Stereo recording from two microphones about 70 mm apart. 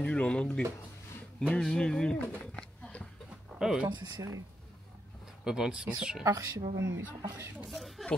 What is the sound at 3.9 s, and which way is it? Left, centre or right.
Speech, right.